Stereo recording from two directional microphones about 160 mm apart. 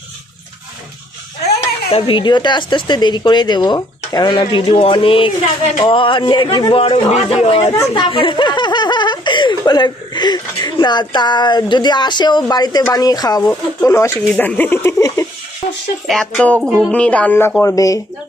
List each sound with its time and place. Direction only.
1.9 s a woman's voice: 35° left (ahead or behind)
7.6 s a woman's voice: 25° left (ahead or behind)
16.0 s speech: 5° left (ahead or behind)
16.6 s music: 5° right (ahead or behind)
16.9 s speech: 10° left (ahead or behind)